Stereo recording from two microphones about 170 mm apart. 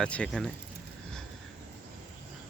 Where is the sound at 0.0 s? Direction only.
5° left (ahead or behind).